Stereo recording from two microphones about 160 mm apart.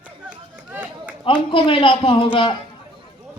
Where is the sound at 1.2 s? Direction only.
30° left (ahead or behind).